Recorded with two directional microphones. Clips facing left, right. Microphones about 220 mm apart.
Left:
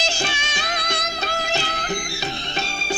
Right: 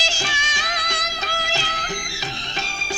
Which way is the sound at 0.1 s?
60° left (ahead or behind).